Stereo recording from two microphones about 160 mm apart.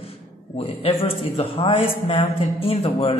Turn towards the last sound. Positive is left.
turn(degrees=40)  # may be behind; listen again after turning